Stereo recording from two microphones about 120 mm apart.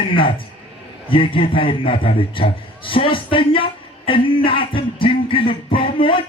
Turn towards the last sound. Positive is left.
turn(degrees=45)  # may be behind; listen again after turning